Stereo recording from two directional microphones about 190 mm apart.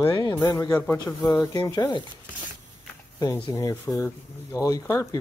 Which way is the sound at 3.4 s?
15° left (ahead or behind).